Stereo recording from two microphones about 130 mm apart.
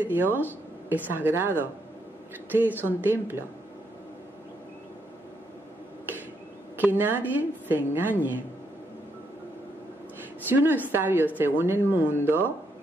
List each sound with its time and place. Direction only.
0.0 s a woman's voice: 15° right (ahead or behind)
2.8 s a woman's voice: 15° right (ahead or behind)
6.8 s a woman's voice: 15° right (ahead or behind)
10.5 s a woman's voice: 15° right (ahead or behind)